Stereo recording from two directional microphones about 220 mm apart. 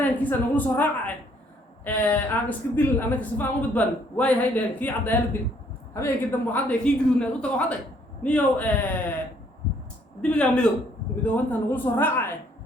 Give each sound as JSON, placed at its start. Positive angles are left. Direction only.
{"t": 0.0, "sound": "speech", "side_deg": 10}
{"t": 6.5, "sound": "speech", "side_deg": 5}
{"t": 10.2, "sound": "speech", "side_deg": 5}